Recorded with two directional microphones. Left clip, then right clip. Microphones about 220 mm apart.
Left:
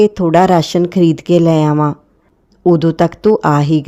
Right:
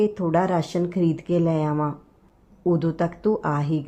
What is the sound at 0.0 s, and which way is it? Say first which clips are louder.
Speech: left 12 dB; 40° left (ahead or behind).